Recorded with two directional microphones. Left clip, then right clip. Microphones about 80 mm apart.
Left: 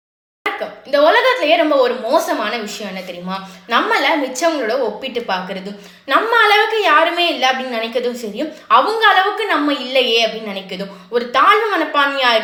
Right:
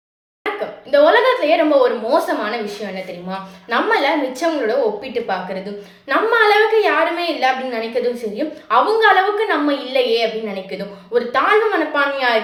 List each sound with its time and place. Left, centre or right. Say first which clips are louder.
0.4 s a woman's voice: left 1 dB; right
6.1 s a woman's voice: left 2 dB; right